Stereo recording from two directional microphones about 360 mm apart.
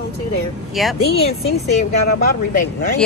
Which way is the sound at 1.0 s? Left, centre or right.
Left.